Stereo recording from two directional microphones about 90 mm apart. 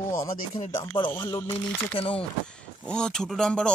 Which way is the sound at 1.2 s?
45° left (ahead or behind).